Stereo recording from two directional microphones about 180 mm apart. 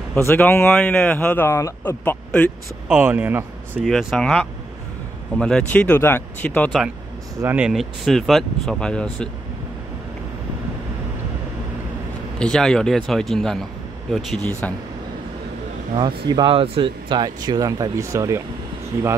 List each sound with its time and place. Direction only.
0.3 s speech: 10° left (ahead or behind)
2.9 s speech: 10° right (ahead or behind)
3.8 s speech: centre (ahead or behind)
7.4 s speech: 5° right (ahead or behind)
12.4 s speech: 5° left (ahead or behind)
16.3 s speech: 25° right (ahead or behind)